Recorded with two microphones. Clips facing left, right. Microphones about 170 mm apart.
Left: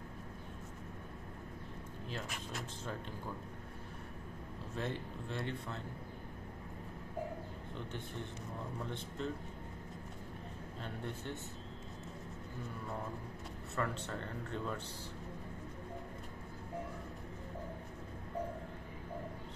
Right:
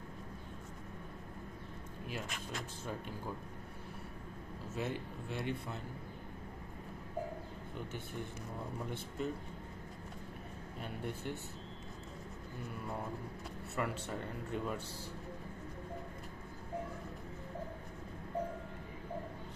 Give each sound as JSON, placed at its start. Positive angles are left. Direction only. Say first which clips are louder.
{"t": 4.7, "sound": "a man's voice", "louder": "right 1 dB", "side_deg": -10}
{"t": 8.8, "sound": "a man's voice", "louder": "right 2 dB", "side_deg": -10}
{"t": 13.7, "sound": "a man's voice", "louder": "even", "side_deg": -10}